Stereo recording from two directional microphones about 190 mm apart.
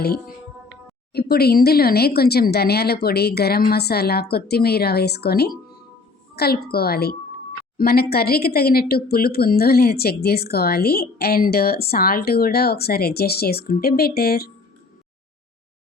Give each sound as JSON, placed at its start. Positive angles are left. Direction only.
{"t": 1.1, "sound": "speech", "side_deg": 55}